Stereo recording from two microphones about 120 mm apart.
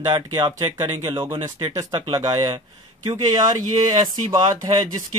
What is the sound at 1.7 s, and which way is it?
Speech, 35° right (ahead or behind).